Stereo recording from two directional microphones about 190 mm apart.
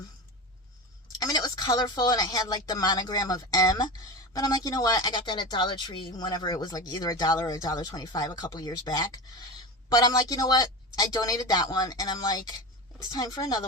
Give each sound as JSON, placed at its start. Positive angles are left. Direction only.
{"t": 1.2, "sound": "speech", "side_deg": 20}